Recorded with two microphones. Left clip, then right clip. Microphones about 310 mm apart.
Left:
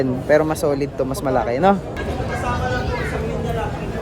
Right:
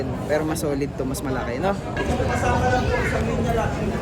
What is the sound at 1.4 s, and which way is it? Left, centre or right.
Speech, left.